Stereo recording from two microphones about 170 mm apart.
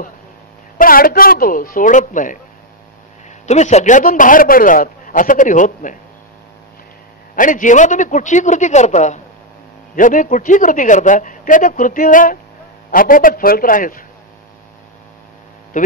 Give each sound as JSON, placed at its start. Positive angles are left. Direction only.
{"t": 0.7, "sound": "speech", "side_deg": 55}
{"t": 3.4, "sound": "speech", "side_deg": 40}
{"t": 7.3, "sound": "speech", "side_deg": 50}
{"t": 15.7, "sound": "mains hum", "side_deg": 50}